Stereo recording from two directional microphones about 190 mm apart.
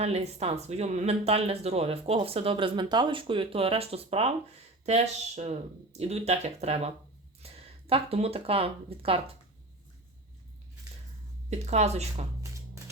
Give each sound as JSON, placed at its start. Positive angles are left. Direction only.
{"t": 0.0, "sound": "speech", "side_deg": -35}
{"t": 11.4, "sound": "speech", "side_deg": -35}